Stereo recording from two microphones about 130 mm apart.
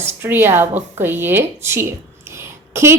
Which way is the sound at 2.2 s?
20° right (ahead or behind).